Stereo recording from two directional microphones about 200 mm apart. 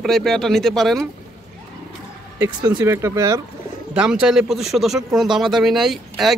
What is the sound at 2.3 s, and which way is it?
Speech, 20° right (ahead or behind).